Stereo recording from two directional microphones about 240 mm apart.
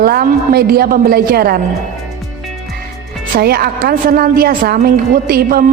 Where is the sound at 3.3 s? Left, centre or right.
Right.